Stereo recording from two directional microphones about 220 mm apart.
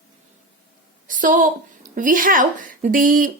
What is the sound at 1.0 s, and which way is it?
A woman's voice, 35° right (ahead or behind).